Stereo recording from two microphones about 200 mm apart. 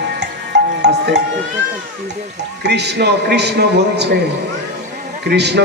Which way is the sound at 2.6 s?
55° right (ahead or behind).